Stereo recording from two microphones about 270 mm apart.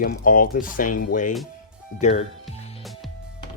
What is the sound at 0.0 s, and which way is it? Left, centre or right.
Speech, left.